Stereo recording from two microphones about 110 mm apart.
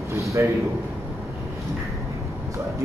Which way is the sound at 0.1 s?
25° right (ahead or behind).